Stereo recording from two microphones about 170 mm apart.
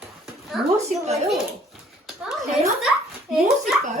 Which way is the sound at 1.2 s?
Centre (ahead or behind).